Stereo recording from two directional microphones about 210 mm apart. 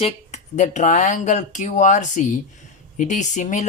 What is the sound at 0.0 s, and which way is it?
Speech, 30° left (ahead or behind).